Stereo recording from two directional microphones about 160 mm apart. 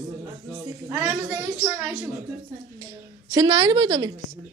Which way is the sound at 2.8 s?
25° right (ahead or behind).